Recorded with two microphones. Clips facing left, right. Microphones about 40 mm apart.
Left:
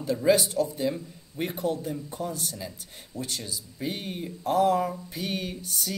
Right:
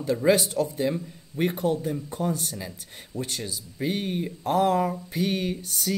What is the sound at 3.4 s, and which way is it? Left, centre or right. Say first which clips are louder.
Speech: right 3 dB; right.